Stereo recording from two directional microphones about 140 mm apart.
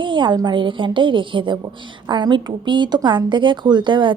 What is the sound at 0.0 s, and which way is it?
A woman's voice, 35° right (ahead or behind).